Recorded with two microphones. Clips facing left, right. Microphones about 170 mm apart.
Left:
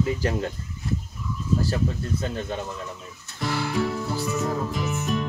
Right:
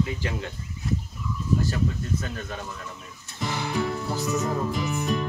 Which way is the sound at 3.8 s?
Centre (ahead or behind).